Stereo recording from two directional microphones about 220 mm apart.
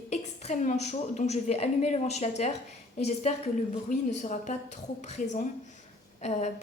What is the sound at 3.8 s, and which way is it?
A woman's voice, 35° left (ahead or behind).